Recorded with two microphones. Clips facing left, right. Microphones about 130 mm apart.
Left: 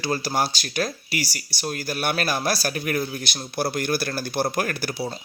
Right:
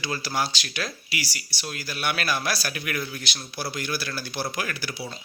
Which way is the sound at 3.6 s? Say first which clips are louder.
Left 7 dB; 50° left (ahead or behind).